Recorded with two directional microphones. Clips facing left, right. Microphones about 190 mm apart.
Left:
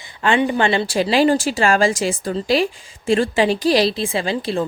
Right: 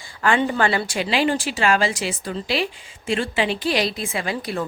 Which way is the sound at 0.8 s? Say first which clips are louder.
Left 6 dB; 40° left (ahead or behind).